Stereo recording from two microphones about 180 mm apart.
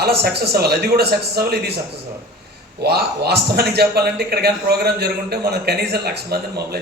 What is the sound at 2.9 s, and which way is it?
A man's voice, 65° right (ahead or behind).